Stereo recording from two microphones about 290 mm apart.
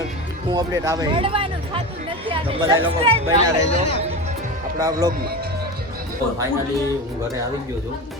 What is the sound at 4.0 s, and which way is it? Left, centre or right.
Music, right.